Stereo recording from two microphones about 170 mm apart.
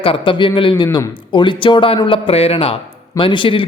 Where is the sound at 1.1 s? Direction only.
25° left (ahead or behind).